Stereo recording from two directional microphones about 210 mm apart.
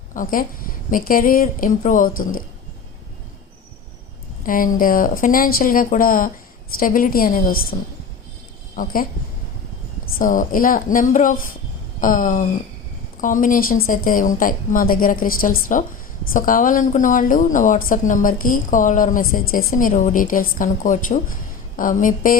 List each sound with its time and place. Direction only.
0.1 s a woman's voice: 40° left (ahead or behind)
4.4 s a woman's voice: 40° left (ahead or behind)
10.2 s speech: 40° left (ahead or behind)